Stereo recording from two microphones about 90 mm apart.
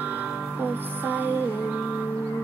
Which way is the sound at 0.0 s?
20° right (ahead or behind).